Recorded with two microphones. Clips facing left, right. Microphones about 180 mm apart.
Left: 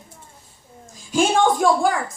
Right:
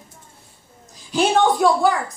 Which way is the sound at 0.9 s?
45° left (ahead or behind).